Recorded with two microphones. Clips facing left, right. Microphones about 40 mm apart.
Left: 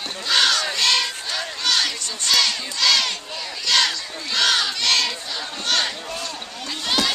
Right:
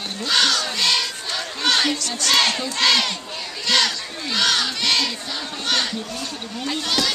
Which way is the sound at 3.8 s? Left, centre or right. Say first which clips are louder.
Even; centre.